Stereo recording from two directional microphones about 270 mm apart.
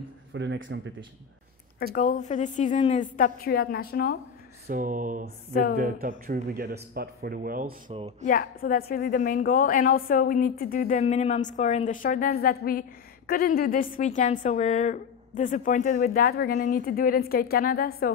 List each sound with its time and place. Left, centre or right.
0.3 s speech: right
2.0 s a woman's voice: left
4.6 s a sound: right
5.5 s a woman's voice: left
5.8 s speech: right
8.3 s a woman's voice: left